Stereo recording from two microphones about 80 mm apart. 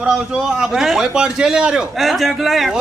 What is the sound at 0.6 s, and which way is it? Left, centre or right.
A man's voice, centre.